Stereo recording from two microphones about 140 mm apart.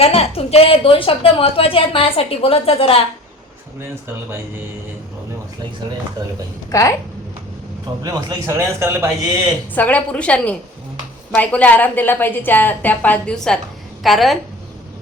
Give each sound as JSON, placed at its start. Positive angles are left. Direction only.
{"t": 0.0, "sound": "a woman's voice", "side_deg": 45}
{"t": 6.7, "sound": "a woman's voice", "side_deg": 25}
{"t": 8.0, "sound": "a man's voice", "side_deg": -25}
{"t": 9.7, "sound": "a woman's voice", "side_deg": 10}